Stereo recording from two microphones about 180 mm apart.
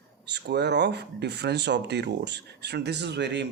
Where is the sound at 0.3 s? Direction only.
65° right (ahead or behind).